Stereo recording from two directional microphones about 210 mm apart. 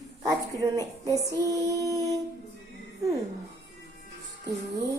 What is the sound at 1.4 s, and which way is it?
Speech, 15° right (ahead or behind).